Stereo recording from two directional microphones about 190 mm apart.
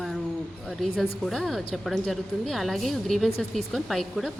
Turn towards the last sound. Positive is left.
turn(degrees=0)  # may be behind; listen again after turning